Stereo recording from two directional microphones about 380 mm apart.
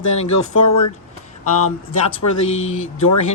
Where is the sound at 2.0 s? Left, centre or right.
Left.